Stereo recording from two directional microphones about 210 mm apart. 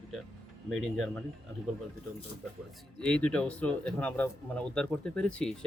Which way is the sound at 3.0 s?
5° left (ahead or behind).